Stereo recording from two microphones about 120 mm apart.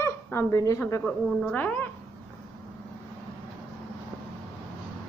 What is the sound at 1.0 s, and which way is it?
Speech, 10° left (ahead or behind).